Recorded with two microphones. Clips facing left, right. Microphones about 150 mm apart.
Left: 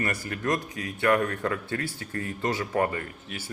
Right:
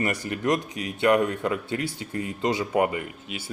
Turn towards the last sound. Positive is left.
turn(degrees=-15)  # may be behind; listen again after turning